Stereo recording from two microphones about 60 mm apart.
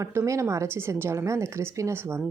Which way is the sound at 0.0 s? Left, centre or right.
Right.